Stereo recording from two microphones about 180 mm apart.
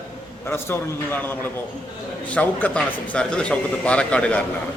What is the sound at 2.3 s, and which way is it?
A man's voice, 10° left (ahead or behind).